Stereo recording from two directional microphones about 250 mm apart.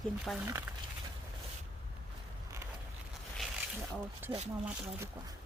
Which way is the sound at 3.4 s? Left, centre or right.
Centre.